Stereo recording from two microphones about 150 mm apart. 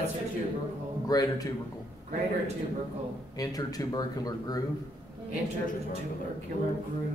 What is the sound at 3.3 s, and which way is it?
A man's voice, 25° left (ahead or behind).